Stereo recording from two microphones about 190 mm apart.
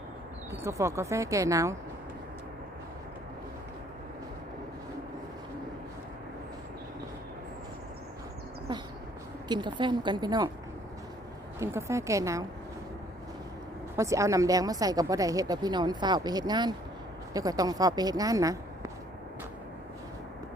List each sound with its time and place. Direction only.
0.5 s speech: 15° right (ahead or behind)
9.5 s speech: 25° right (ahead or behind)
11.6 s speech: 15° right (ahead or behind)
13.9 s speech: 15° right (ahead or behind)